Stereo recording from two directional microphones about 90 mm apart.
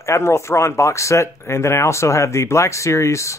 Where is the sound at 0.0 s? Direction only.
30° left (ahead or behind).